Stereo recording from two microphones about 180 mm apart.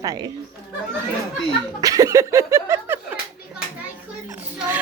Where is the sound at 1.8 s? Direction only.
20° right (ahead or behind).